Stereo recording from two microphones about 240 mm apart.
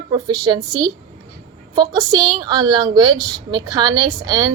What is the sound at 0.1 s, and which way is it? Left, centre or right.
A woman's voice, centre.